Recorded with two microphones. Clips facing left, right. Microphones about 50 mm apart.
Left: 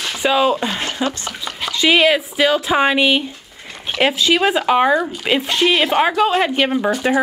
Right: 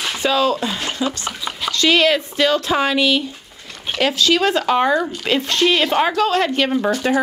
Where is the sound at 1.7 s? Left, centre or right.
Centre.